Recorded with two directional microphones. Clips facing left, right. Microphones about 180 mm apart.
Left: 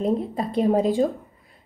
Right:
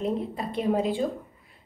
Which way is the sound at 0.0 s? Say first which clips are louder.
Left 5 dB; 35° left (ahead or behind).